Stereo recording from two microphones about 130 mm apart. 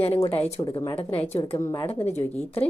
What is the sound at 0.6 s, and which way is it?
A woman's voice, 35° left (ahead or behind).